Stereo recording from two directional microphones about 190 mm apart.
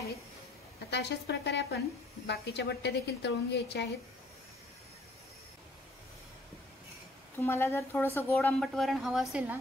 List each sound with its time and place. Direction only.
0.8 s a woman's voice: 65° left (ahead or behind)
7.3 s a woman's voice: 10° left (ahead or behind); by 9.6 s 5° right (ahead or behind)